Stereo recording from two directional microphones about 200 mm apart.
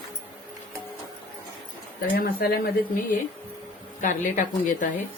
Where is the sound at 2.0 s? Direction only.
50° left (ahead or behind).